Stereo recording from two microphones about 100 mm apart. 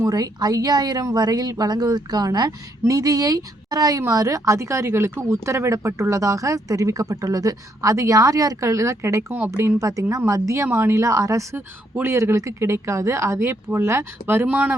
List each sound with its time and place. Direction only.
0.0 s speech: 40° right (ahead or behind); by 14.8 s 15° right (ahead or behind)